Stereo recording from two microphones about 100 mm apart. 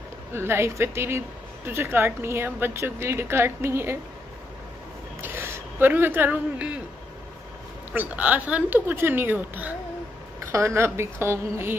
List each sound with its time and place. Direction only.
0.3 s a woman's voice: 25° right (ahead or behind)
5.2 s speech: 20° right (ahead or behind)
7.9 s a woman's voice: 15° right (ahead or behind)
10.4 s a woman's voice: 30° right (ahead or behind)